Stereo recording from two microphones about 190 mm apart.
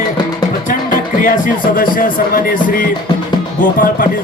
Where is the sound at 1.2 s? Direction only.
45° left (ahead or behind).